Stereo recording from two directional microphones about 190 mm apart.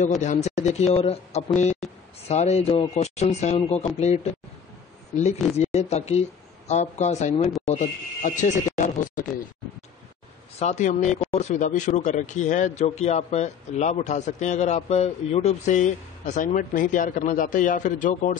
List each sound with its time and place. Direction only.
0.2 s speech: 40° left (ahead or behind)
10.6 s speech: 35° left (ahead or behind)